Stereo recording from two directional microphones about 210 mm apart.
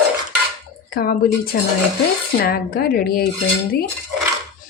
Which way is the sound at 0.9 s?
45° left (ahead or behind).